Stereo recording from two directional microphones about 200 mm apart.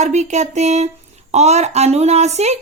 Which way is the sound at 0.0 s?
35° right (ahead or behind).